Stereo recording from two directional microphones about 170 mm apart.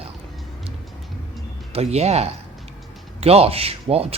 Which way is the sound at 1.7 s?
40° right (ahead or behind).